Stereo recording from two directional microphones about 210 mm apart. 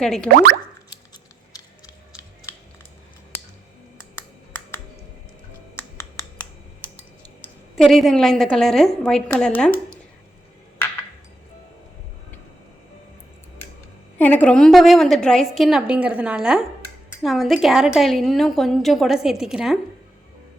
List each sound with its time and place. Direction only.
0.0 s a woman's voice: 5° left (ahead or behind)
7.8 s a woman's voice: centre (ahead or behind)
14.2 s a woman's voice: 5° left (ahead or behind)